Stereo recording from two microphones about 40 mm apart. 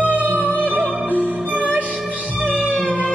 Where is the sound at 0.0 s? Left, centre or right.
Right.